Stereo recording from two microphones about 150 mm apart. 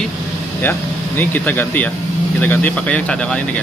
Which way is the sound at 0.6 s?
15° left (ahead or behind).